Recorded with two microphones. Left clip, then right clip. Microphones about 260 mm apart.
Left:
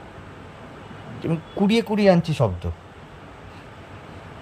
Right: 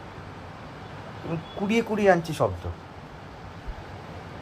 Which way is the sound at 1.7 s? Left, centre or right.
Left.